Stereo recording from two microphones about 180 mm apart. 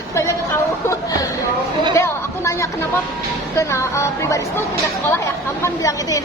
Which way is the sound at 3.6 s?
15° left (ahead or behind).